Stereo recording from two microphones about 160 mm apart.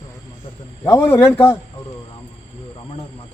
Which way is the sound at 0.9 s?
15° left (ahead or behind).